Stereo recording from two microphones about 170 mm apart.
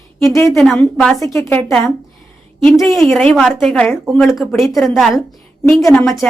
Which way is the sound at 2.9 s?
Centre (ahead or behind).